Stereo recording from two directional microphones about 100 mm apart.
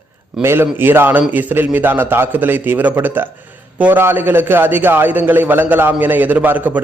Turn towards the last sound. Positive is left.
turn(degrees=-15)  # may be behind; listen again after turning